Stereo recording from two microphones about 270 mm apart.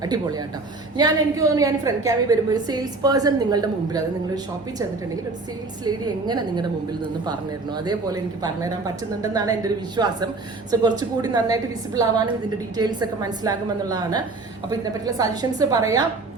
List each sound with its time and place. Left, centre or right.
0.0 s a woman's voice: centre
5.8 s a woman's voice: centre
7.9 s a woman's voice: centre